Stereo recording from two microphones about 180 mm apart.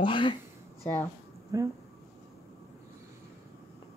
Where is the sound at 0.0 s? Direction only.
25° left (ahead or behind).